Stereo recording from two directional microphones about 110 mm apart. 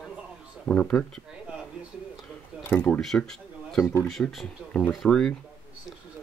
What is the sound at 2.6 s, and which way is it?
Speech, 20° left (ahead or behind).